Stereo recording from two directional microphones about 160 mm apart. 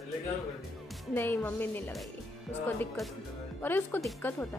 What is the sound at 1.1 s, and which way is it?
Speech, 15° left (ahead or behind).